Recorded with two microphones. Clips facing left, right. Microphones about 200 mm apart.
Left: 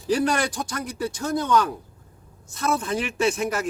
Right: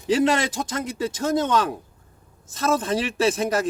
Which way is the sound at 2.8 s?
35° right (ahead or behind).